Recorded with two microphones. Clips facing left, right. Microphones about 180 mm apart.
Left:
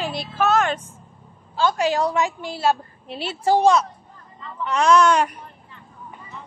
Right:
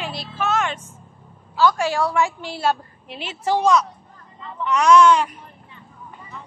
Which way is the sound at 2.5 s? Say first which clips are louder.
Left 2 dB; 10° left (ahead or behind).